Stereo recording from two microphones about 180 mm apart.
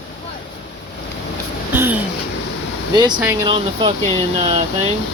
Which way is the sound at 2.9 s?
25° right (ahead or behind).